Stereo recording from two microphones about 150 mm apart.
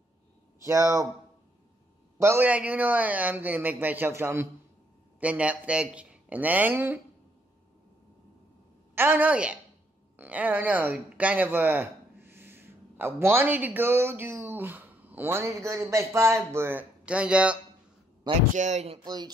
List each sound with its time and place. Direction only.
0.7 s speech: 20° right (ahead or behind)
2.1 s a man's voice: 15° right (ahead or behind)
8.9 s a man's voice: 15° right (ahead or behind)
18.5 s speech: 50° right (ahead or behind)
19.0 s speech: 25° right (ahead or behind)